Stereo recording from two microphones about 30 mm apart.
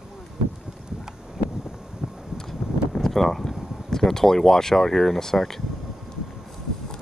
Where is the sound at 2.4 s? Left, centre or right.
Centre.